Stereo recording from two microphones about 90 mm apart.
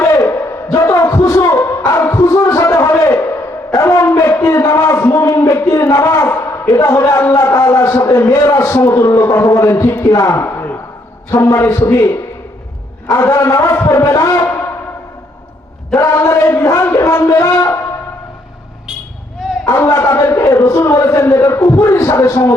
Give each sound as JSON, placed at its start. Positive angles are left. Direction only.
{"t": 0.0, "sound": "a sound", "side_deg": 30}
{"t": 11.3, "sound": "a man's voice", "side_deg": 35}
{"t": 16.0, "sound": "a man's voice", "side_deg": 30}
{"t": 19.7, "sound": "a man's voice", "side_deg": 30}